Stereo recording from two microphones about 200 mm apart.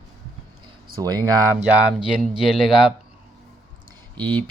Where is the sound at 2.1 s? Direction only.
Centre (ahead or behind).